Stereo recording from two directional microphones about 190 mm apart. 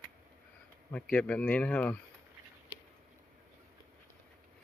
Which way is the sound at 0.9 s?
5° left (ahead or behind).